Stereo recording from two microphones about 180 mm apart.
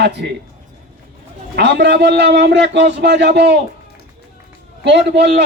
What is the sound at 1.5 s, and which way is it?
A man's voice, 75° right (ahead or behind).